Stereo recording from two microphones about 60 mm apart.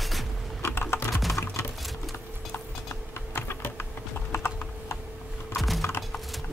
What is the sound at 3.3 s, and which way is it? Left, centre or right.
Typing, left.